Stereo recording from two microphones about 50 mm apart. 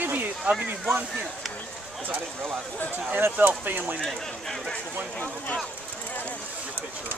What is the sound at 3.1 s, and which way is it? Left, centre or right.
Speech, right.